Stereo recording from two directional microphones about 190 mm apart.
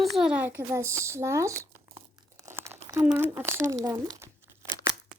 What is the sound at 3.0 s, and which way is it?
Speech, 10° right (ahead or behind).